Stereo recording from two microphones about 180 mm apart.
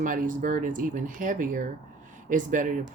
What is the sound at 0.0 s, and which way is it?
Speech, 45° right (ahead or behind).